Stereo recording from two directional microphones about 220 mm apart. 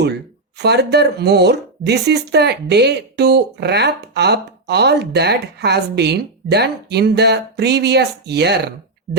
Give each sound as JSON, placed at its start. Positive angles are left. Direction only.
{"t": 0.6, "sound": "speech", "side_deg": -50}